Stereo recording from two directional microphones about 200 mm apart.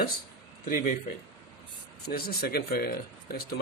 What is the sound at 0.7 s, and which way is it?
Speech, 45° left (ahead or behind).